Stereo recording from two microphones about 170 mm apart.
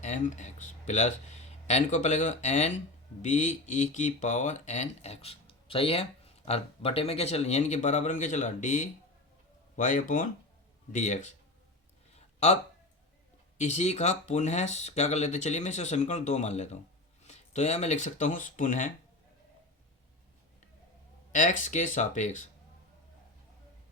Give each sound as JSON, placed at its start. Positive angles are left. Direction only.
{"t": 0.0, "sound": "speech", "side_deg": 45}
{"t": 12.1, "sound": "a sound", "side_deg": 40}
{"t": 13.6, "sound": "speech", "side_deg": 40}
{"t": 21.3, "sound": "speech", "side_deg": 50}